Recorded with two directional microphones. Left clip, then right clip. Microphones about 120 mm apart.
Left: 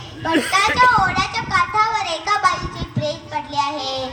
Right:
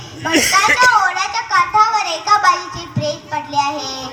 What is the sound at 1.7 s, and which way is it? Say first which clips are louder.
Music: right 5 dB; 5° right (ahead or behind).